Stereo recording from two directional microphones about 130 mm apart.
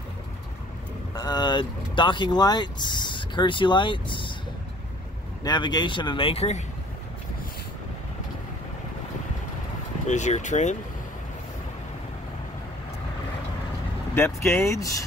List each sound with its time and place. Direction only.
1.1 s speech: 30° left (ahead or behind)
5.4 s speech: 35° left (ahead or behind); by 6.6 s 55° left (ahead or behind)
10.0 s speech: 65° left (ahead or behind)
14.1 s speech: 20° left (ahead or behind)